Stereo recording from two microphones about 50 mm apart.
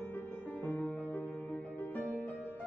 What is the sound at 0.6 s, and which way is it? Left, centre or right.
Music, left.